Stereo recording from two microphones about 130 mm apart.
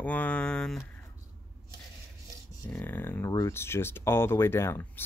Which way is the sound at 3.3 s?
25° left (ahead or behind).